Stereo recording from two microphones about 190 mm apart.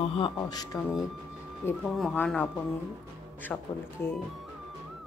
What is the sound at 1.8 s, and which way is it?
Speech, centre (ahead or behind).